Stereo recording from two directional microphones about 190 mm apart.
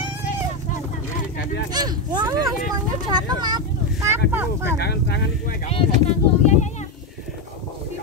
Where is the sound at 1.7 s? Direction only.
20° right (ahead or behind).